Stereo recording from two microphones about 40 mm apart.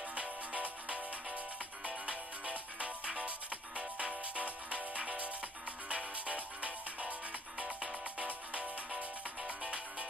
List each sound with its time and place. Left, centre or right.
0.1 s music: right